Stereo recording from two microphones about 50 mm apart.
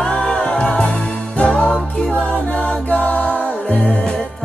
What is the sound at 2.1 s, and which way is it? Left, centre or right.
Music, left.